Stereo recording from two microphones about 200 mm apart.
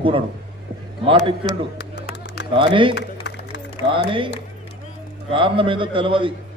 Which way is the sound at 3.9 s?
25° right (ahead or behind).